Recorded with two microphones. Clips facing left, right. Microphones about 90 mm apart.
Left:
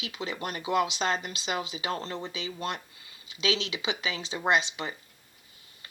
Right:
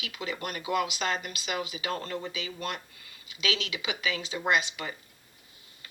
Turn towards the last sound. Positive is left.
turn(degrees=30)  # may be behind; listen again after turning